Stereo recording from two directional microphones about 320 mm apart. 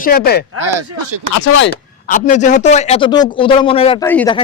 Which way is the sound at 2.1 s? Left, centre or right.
Left.